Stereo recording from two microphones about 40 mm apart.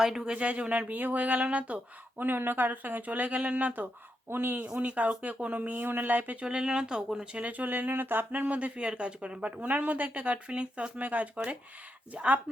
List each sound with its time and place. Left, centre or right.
0.0 s speech: centre
0.3 s speech: right
2.1 s speech: right
4.3 s speech: right
4.6 s speech: right
5.8 s speech: right
6.4 s speech: right
7.3 s speech: right
8.3 s speech: right
10.3 s speech: right